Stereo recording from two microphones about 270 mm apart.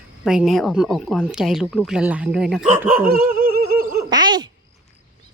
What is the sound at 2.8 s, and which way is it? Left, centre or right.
Dog, right.